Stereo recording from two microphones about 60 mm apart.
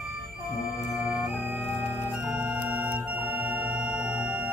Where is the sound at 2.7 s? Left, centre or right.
Right.